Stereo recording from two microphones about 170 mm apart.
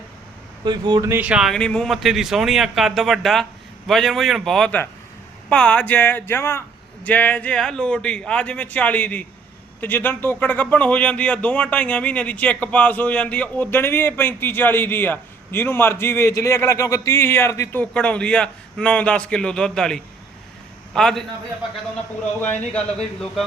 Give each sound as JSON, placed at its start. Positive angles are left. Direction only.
{"t": 0.6, "sound": "speech", "side_deg": -25}
{"t": 1.1, "sound": "a man's voice", "side_deg": -5}